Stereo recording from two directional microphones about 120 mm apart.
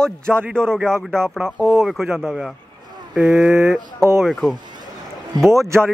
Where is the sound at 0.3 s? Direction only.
15° right (ahead or behind).